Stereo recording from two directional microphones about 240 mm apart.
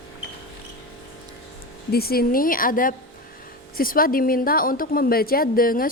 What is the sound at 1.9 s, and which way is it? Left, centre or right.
A woman's voice, left.